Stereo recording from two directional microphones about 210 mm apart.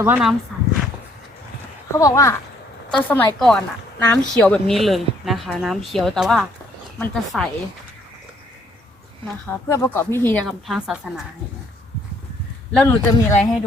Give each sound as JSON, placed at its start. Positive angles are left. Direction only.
{"t": 0.0, "sound": "a woman's voice", "side_deg": -5}
{"t": 2.0, "sound": "a woman's voice", "side_deg": 15}
{"t": 9.5, "sound": "speech", "side_deg": 10}
{"t": 12.7, "sound": "speech", "side_deg": 10}